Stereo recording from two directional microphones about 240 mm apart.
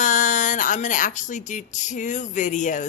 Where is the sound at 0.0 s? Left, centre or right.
Left.